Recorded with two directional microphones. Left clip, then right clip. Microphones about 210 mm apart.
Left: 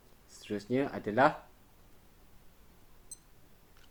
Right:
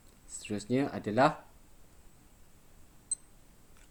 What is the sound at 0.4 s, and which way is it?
Speech, 50° right (ahead or behind).